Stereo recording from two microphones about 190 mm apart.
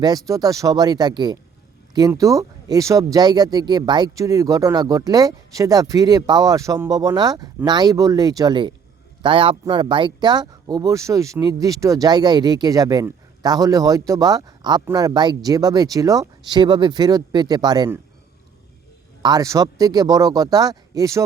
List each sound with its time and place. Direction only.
0.0 s speech: 20° right (ahead or behind)
19.2 s speech: 20° right (ahead or behind)